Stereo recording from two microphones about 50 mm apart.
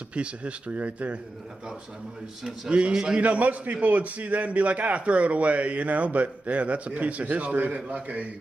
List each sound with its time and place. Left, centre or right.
0.1 s speech: right
2.7 s a man's voice: centre
3.2 s a man's voice: right